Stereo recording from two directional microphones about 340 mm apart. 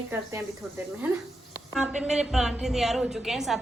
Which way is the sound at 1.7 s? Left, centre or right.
Centre.